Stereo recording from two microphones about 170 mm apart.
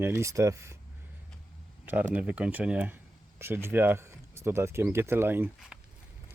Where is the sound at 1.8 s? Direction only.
10° right (ahead or behind).